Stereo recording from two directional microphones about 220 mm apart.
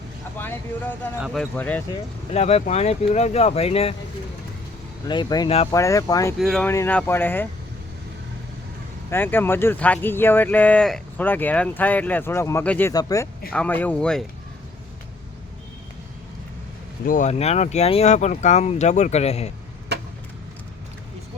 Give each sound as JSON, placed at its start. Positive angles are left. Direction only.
{"t": 0.3, "sound": "speech", "side_deg": 10}
{"t": 2.3, "sound": "speech", "side_deg": 30}
{"t": 5.0, "sound": "speech", "side_deg": 20}
{"t": 6.4, "sound": "speech", "side_deg": 5}
{"t": 9.0, "sound": "speech", "side_deg": 10}
{"t": 17.1, "sound": "speech", "side_deg": 35}